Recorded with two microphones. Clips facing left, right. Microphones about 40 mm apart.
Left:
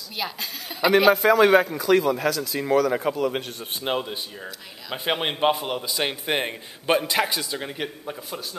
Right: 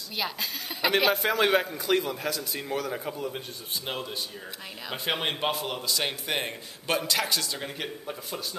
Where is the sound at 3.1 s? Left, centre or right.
Left.